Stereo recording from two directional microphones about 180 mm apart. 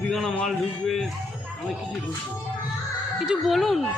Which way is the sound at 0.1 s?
Centre (ahead or behind).